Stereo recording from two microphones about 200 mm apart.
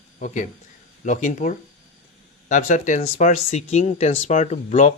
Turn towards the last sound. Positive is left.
turn(degrees=35)  # may be behind; listen again after turning